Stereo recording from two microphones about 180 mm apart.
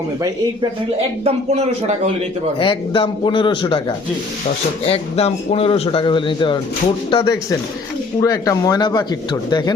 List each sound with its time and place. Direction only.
1.2 s a man's voice: 40° right (ahead or behind)
2.6 s a man's voice: 30° left (ahead or behind)